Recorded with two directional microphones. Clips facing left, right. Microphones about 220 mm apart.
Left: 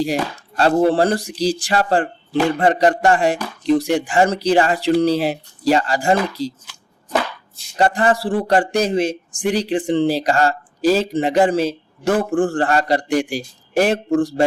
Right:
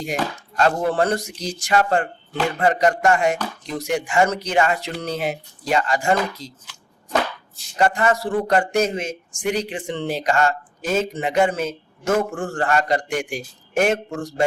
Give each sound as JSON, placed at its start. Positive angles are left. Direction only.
{"t": 0.0, "sound": "a man's voice", "side_deg": 35}
{"t": 7.8, "sound": "a man's voice", "side_deg": 30}